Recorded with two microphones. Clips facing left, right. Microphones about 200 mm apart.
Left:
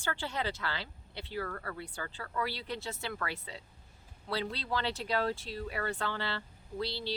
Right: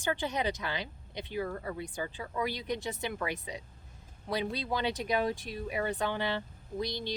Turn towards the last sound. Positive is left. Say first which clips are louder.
# right 1 dB
turn(degrees=-15)  # may be behind; listen again after turning